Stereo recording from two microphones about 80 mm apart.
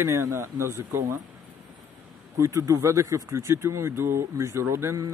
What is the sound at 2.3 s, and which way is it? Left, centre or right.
Speech, right.